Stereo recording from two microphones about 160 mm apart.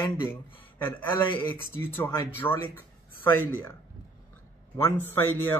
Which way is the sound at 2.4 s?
15° left (ahead or behind).